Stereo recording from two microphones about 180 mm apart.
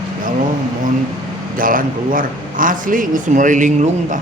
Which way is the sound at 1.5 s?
50° right (ahead or behind).